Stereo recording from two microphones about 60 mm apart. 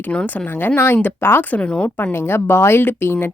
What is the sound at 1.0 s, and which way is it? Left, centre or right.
Speech, left.